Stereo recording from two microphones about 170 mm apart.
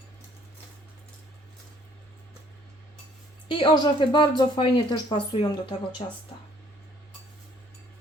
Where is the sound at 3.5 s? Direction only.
30° left (ahead or behind).